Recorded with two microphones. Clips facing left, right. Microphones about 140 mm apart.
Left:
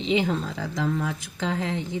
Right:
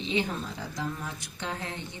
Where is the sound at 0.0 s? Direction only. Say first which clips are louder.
Left 6 dB; 90° left.